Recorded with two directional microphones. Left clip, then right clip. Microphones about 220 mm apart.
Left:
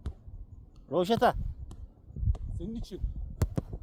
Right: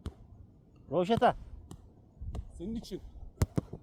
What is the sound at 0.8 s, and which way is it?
Speech, 40° left (ahead or behind).